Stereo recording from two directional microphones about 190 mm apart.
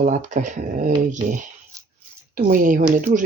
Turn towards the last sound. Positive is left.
turn(degrees=-45)  # may be behind; listen again after turning